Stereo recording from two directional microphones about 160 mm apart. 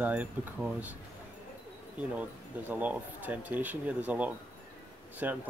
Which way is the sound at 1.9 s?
10° right (ahead or behind).